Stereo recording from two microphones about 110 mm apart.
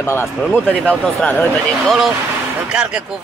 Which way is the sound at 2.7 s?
10° right (ahead or behind).